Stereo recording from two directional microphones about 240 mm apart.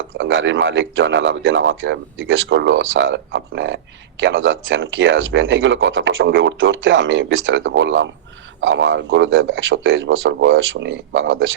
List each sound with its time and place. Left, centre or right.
0.2 s speech: right